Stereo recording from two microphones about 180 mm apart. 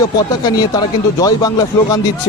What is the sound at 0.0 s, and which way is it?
Speech, 20° left (ahead or behind).